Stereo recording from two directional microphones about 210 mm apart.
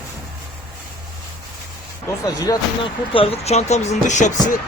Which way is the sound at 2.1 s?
15° left (ahead or behind).